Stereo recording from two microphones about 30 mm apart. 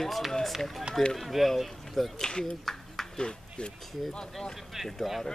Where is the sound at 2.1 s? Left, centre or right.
Centre.